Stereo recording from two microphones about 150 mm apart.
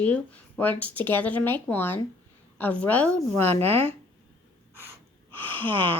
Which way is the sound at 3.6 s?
40° right (ahead or behind).